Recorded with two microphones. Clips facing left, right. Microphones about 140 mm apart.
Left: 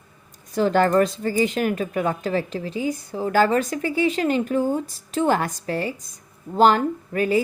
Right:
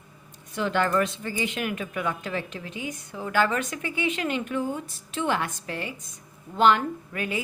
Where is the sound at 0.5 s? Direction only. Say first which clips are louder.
Left 6 dB; 40° left (ahead or behind).